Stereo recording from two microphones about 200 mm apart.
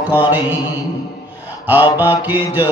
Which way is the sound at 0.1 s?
10° right (ahead or behind).